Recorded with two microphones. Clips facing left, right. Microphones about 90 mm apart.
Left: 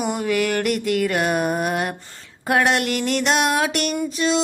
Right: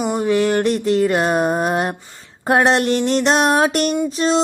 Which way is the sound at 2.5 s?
30° right (ahead or behind).